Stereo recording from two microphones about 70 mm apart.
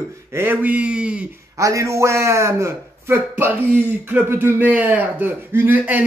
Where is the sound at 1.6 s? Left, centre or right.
Right.